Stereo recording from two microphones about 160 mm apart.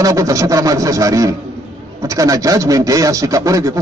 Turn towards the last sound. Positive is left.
turn(degrees=-20)  # may be behind; listen again after turning